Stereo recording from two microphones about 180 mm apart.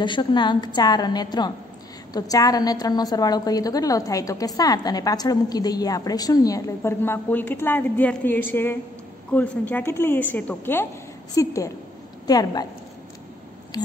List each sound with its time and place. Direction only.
0.0 s a woman's voice: 25° left (ahead or behind)